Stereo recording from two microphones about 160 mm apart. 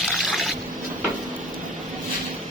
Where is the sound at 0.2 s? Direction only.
Centre (ahead or behind).